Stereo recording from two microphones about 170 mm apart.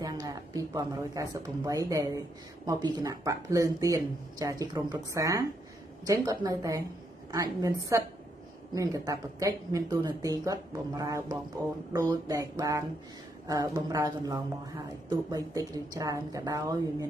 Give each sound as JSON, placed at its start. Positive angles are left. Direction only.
{"t": 0.0, "sound": "speech", "side_deg": -20}
{"t": 7.9, "sound": "a woman's voice", "side_deg": -15}